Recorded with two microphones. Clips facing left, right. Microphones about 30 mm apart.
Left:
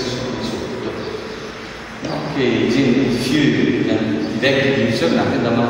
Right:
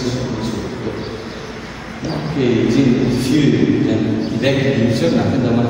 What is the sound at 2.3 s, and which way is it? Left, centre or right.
A man's voice, centre.